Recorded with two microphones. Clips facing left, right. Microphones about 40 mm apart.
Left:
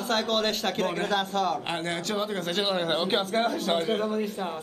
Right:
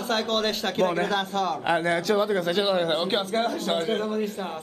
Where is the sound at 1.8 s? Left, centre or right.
Right.